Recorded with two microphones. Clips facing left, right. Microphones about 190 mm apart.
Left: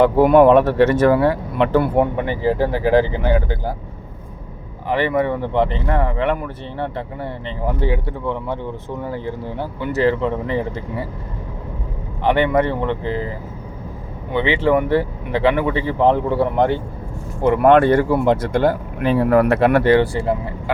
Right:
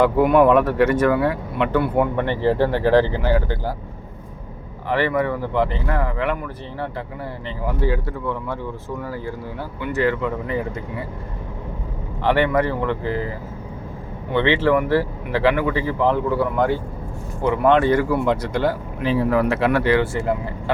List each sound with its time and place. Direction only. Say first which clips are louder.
0.0 s speech: left 3 dB; 30° left (ahead or behind)
2.1 s speech: even; 10° left (ahead or behind)
4.9 s speech: left 2 dB; 20° left (ahead or behind)
12.2 s speech: left 2 dB; 20° left (ahead or behind)
14.3 s speech: left 1 dB; 15° left (ahead or behind)
17.4 s speech: left 4 dB; 55° left (ahead or behind)
17.9 s speech: left 3 dB; 30° left (ahead or behind)
18.3 s speech: left 4 dB; 50° left (ahead or behind)